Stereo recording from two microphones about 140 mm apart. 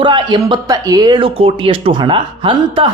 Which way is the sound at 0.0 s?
30° right (ahead or behind).